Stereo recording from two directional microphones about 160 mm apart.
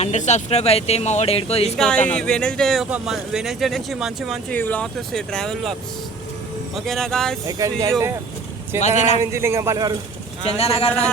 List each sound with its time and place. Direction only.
0.0 s speech: 45° left (ahead or behind)
1.8 s speech: 5° left (ahead or behind)
4.5 s speech: 10° left (ahead or behind)
6.7 s speech: centre (ahead or behind)
7.4 s speech: 20° right (ahead or behind)
9.0 s speech: 45° left (ahead or behind)
9.2 s a man's voice: 15° right (ahead or behind)
10.4 s speech: 40° left (ahead or behind)